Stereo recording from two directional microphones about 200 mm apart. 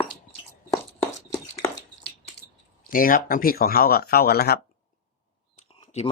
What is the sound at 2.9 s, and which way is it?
Speech, 45° left (ahead or behind).